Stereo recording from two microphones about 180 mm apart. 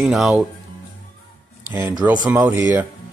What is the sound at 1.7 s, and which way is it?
Speech, 15° right (ahead or behind).